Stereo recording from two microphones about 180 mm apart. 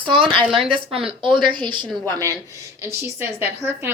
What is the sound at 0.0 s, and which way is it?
Speech, centre (ahead or behind).